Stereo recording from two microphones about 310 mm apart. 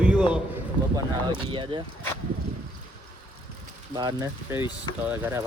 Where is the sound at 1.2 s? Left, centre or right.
Centre.